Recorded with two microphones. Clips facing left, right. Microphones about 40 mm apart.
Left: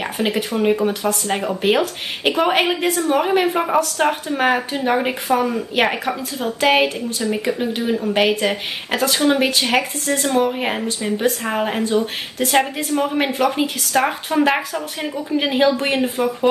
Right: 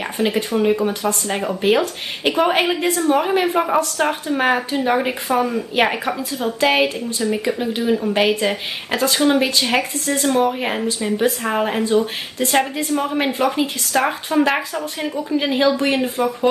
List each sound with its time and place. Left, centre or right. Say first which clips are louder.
0.0 s a sound: right 1 dB; centre
0.5 s speech: even; centre
12.7 s a woman's voice: even; centre
13.1 s speech: even; centre